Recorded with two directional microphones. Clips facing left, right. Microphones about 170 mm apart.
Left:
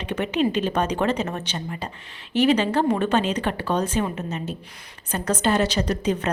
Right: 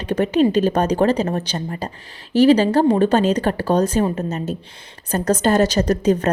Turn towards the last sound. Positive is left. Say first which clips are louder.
# right 6 dB
turn(degrees=-40)  # may be behind; listen again after turning